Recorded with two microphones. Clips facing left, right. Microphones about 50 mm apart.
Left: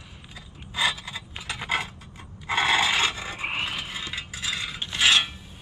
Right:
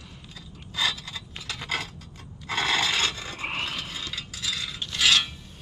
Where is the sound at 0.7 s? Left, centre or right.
Left.